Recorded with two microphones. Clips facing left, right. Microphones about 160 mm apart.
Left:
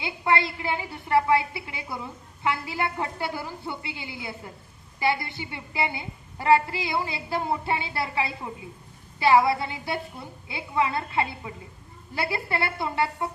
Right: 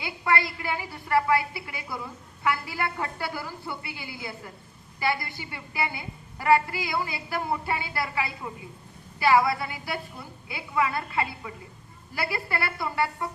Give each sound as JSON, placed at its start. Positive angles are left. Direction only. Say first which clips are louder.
{"t": 0.0, "sound": "a woman's voice", "louder": "left 2 dB", "side_deg": 25}